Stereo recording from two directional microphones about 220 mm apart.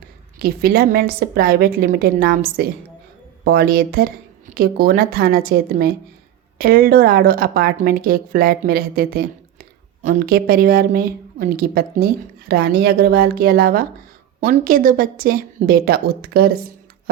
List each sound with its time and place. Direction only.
0.3 s a woman's voice: 45° right (ahead or behind)